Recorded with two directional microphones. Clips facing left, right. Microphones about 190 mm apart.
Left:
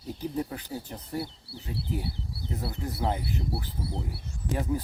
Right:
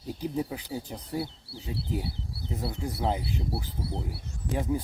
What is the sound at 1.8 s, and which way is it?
Speech, centre (ahead or behind).